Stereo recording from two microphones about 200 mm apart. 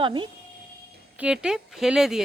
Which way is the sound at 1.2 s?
5° right (ahead or behind).